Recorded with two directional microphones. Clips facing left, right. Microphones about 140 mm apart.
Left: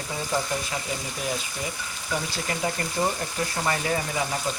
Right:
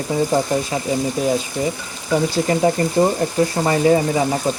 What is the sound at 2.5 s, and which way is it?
Speech, 35° right (ahead or behind).